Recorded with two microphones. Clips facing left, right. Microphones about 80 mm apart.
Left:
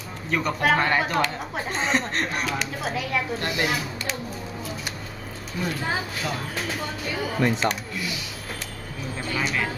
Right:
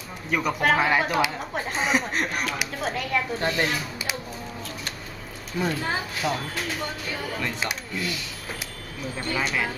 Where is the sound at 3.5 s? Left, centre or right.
Centre.